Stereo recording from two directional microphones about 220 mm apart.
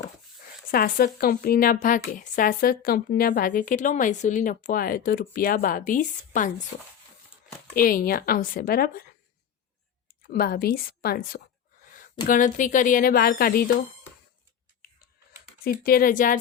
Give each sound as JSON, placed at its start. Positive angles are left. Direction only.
{"t": 0.7, "sound": "a woman's voice", "side_deg": 40}
{"t": 10.2, "sound": "a woman's voice", "side_deg": 40}
{"t": 15.6, "sound": "a woman's voice", "side_deg": 40}